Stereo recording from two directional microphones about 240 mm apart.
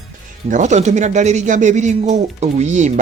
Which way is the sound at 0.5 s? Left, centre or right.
Right.